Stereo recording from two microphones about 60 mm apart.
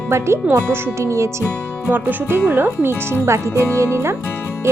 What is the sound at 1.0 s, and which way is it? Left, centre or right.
Speech, right.